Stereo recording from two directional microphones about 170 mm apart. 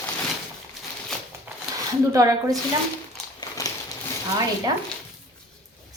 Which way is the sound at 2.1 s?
20° right (ahead or behind).